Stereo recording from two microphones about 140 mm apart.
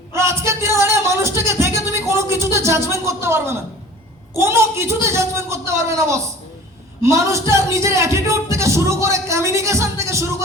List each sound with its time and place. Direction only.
0.1 s music: 20° right (ahead or behind)
4.4 s speech: 20° right (ahead or behind)